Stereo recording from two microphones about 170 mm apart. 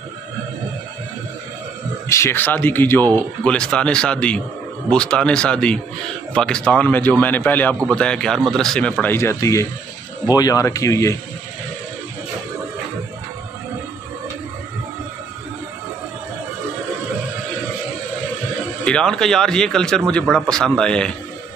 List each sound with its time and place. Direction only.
2.0 s speech: 15° left (ahead or behind)
18.9 s speech: 5° left (ahead or behind)